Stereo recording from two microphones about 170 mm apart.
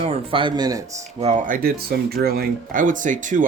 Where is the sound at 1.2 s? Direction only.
45° right (ahead or behind).